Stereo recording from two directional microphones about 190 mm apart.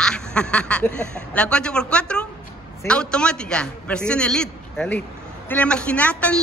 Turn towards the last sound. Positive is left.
turn(degrees=5)  # may be behind; listen again after turning